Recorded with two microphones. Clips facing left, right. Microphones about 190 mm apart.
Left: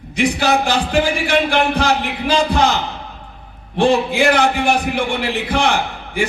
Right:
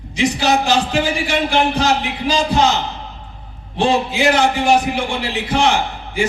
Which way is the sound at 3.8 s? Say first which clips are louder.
Left 2 dB; 55° left (ahead or behind).